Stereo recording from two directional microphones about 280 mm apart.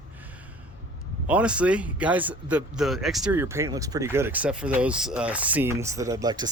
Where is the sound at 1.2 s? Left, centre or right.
Centre.